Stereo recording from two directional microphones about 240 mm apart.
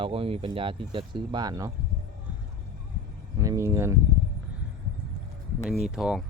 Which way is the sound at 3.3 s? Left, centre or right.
Centre.